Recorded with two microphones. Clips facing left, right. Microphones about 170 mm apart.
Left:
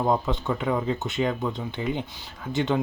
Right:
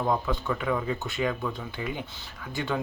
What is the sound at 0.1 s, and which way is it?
Speech, 25° left (ahead or behind).